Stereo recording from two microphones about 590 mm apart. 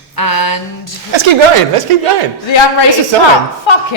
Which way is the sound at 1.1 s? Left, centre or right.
Right.